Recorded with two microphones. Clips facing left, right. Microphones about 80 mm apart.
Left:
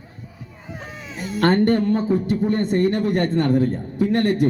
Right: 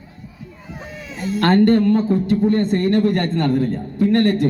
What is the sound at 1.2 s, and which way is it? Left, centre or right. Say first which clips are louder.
Speech: right 3 dB; centre.